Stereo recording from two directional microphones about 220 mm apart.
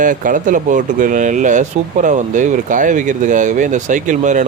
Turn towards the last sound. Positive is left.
turn(degrees=-35)  # may be behind; listen again after turning